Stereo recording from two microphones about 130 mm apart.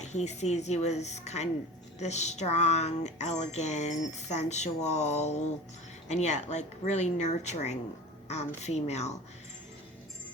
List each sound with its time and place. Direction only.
0.0 s speech: 60° left (ahead or behind)